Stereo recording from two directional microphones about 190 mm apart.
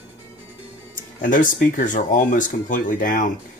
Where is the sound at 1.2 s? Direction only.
45° left (ahead or behind).